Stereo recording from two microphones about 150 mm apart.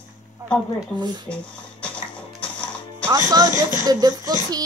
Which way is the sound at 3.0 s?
25° right (ahead or behind).